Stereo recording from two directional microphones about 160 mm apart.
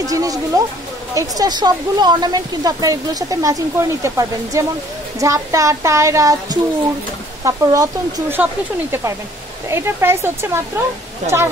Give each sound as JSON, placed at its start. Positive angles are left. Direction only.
{"t": 0.0, "sound": "speech", "side_deg": -20}
{"t": 9.7, "sound": "speech", "side_deg": -15}